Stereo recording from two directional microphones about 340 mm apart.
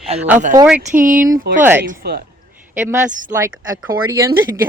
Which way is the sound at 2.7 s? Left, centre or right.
Centre.